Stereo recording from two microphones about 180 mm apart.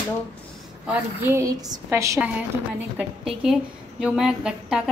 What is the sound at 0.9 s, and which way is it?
A woman's voice, 15° right (ahead or behind).